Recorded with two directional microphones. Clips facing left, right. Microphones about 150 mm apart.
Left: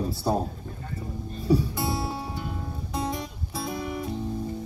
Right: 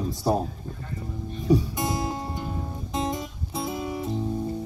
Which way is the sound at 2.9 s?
20° right (ahead or behind).